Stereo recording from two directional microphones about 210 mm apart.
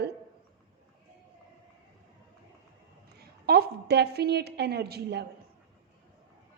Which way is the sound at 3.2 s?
50° right (ahead or behind).